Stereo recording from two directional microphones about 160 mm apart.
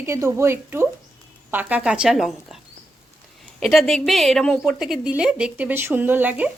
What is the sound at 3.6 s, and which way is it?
A woman's voice, centre (ahead or behind).